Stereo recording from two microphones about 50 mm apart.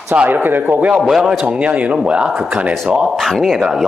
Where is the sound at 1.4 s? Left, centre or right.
Right.